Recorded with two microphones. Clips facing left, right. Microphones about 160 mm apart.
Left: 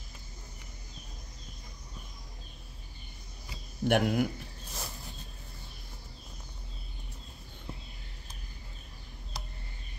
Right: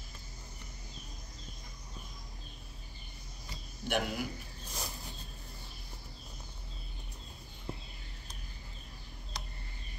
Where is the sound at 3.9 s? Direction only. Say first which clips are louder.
Left 8 dB; 55° left (ahead or behind).